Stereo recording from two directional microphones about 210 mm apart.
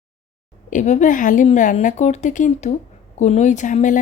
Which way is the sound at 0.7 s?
35° left (ahead or behind).